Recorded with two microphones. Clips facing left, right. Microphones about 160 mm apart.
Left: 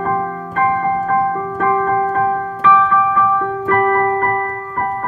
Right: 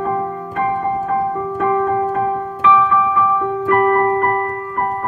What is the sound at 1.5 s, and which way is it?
Keyboard, 50° left (ahead or behind).